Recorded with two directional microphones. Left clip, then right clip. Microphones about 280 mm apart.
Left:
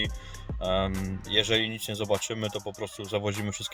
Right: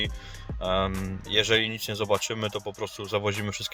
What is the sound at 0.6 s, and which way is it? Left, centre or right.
Speech, centre.